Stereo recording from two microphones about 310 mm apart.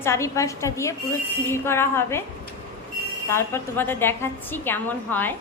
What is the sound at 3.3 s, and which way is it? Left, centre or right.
Speech, centre.